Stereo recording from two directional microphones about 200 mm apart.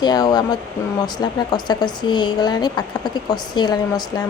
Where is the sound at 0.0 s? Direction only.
20° left (ahead or behind).